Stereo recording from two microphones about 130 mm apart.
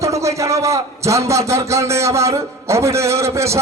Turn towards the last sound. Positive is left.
turn(degrees=-20)  # may be behind; listen again after turning